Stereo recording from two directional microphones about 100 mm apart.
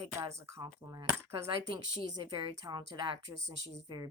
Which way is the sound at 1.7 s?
45° right (ahead or behind).